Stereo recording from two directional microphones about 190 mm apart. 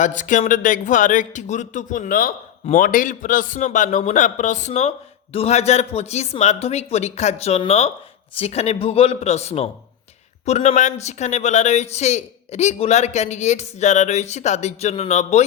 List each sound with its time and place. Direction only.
0.0 s a man's voice: 40° left (ahead or behind)